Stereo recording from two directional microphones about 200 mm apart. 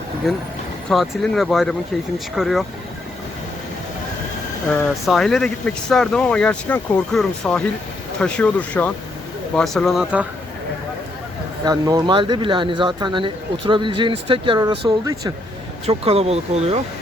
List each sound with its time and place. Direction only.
0.3 s speech: centre (ahead or behind)
4.7 s speech: centre (ahead or behind)
11.6 s speech: 20° right (ahead or behind)